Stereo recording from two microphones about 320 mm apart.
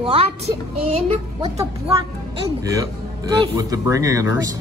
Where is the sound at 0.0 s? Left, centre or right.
Centre.